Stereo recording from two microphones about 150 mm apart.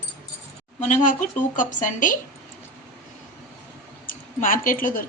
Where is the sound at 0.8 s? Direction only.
60° left (ahead or behind).